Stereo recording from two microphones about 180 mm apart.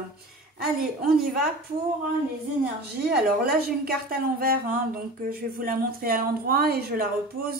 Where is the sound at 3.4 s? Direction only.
55° right (ahead or behind).